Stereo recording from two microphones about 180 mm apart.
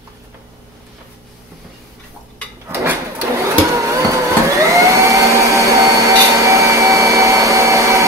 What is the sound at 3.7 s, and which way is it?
Vacuum cleaner, 15° right (ahead or behind).